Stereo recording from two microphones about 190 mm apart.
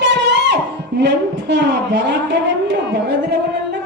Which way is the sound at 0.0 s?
65° right (ahead or behind).